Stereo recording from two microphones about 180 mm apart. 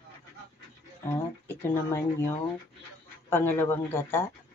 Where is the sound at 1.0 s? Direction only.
10° left (ahead or behind).